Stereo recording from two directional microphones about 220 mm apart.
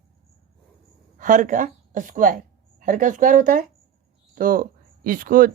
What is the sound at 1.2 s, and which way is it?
A woman's voice, 35° right (ahead or behind).